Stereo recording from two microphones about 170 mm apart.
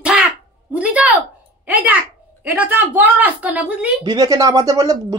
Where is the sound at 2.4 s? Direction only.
10° right (ahead or behind).